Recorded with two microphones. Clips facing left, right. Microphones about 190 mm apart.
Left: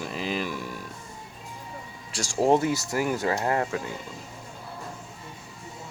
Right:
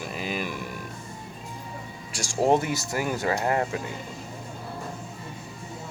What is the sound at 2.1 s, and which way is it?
Speech, 10° right (ahead or behind).